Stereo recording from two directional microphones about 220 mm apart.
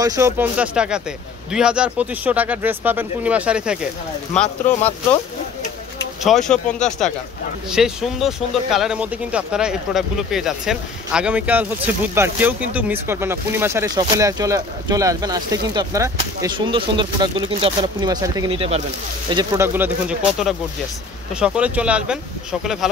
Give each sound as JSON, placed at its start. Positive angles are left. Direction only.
{"t": 0.0, "sound": "speech", "side_deg": -15}
{"t": 6.2, "sound": "speech", "side_deg": 0}